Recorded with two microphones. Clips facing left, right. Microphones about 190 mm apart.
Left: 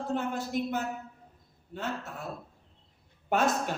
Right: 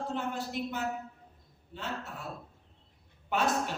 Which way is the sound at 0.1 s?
45° left (ahead or behind).